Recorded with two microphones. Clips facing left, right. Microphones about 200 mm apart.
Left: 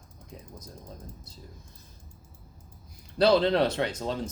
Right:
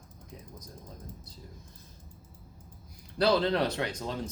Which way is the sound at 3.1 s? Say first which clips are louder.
Left 4 dB; 25° left (ahead or behind).